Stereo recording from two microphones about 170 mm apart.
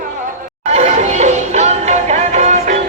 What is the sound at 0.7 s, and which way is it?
Music, 45° right (ahead or behind).